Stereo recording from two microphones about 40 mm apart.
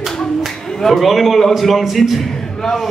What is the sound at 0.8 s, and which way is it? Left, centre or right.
Speech, centre.